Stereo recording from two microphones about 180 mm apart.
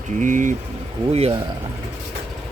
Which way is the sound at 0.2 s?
45° right (ahead or behind).